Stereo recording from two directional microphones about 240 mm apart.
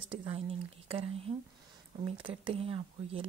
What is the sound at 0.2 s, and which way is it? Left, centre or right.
Speech, right.